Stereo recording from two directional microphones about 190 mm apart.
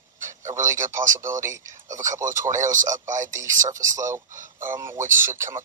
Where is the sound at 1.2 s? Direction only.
15° right (ahead or behind).